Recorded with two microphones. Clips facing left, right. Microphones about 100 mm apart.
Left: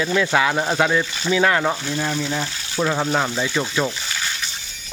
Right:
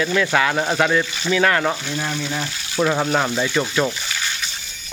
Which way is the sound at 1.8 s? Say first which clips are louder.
Left 2 dB; 5° right (ahead or behind).